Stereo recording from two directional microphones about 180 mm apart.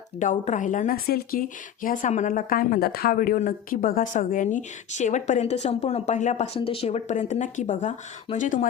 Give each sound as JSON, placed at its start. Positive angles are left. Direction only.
{"t": 0.2, "sound": "speech", "side_deg": 45}